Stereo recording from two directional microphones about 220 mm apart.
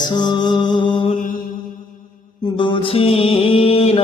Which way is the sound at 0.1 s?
20° left (ahead or behind).